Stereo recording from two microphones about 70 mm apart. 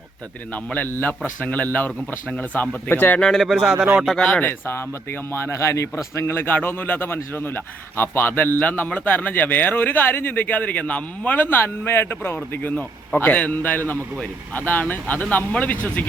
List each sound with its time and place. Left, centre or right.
0.5 s speech: left
3.2 s speech: centre
3.6 s speech: centre
3.9 s speech: centre
4.2 s speech: centre
5.3 s speech: left
6.2 s speech: left
13.1 s speech: centre